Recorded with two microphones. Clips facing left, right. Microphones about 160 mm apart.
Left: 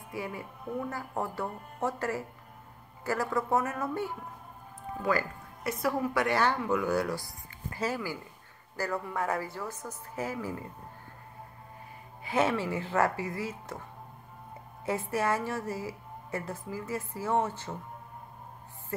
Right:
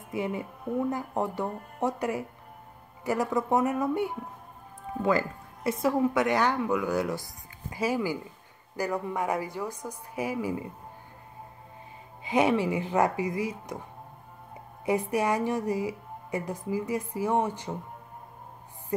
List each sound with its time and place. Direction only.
0.1 s a woman's voice: 20° right (ahead or behind)
12.3 s a woman's voice: 15° right (ahead or behind)
14.9 s a woman's voice: 15° right (ahead or behind)